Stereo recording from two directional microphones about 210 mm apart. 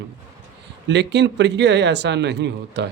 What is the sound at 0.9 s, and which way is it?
Speech, 55° right (ahead or behind).